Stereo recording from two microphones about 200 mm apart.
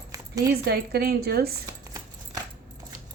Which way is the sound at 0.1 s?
15° right (ahead or behind).